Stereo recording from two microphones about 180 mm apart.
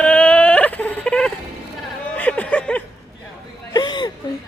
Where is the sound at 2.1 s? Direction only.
10° left (ahead or behind).